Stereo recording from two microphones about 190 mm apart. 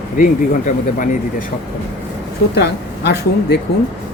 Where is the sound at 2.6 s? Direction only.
60° left (ahead or behind).